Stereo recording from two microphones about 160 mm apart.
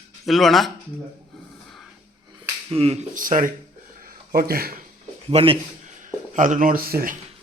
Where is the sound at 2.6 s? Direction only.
40° right (ahead or behind).